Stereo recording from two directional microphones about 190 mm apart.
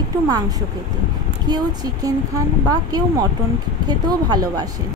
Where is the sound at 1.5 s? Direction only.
20° right (ahead or behind).